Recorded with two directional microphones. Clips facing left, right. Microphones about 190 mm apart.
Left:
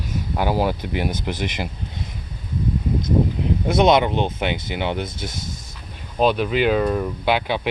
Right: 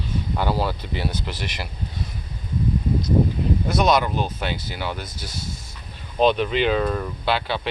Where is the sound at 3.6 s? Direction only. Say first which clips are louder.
Left 5 dB; 25° left (ahead or behind).